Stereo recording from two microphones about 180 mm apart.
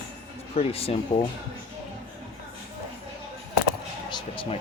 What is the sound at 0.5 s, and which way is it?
Speech, 35° left (ahead or behind).